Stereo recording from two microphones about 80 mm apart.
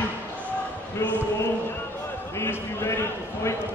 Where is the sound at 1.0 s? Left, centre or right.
Left.